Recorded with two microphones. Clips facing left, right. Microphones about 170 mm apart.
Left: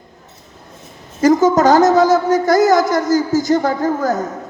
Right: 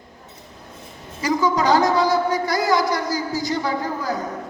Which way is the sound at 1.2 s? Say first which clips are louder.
Left 9 dB; 45° left (ahead or behind).